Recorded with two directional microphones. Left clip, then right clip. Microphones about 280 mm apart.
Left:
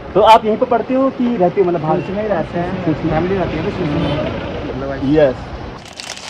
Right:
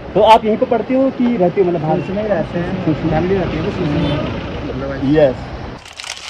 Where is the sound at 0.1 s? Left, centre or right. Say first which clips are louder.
Left 1 dB; left.